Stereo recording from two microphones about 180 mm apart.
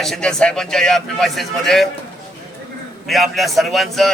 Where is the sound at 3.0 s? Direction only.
Centre (ahead or behind).